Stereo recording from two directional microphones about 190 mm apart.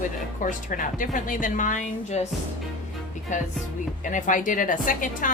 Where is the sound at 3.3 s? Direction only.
40° left (ahead or behind).